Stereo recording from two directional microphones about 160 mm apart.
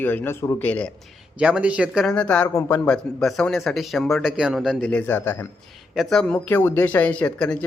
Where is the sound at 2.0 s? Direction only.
5° left (ahead or behind).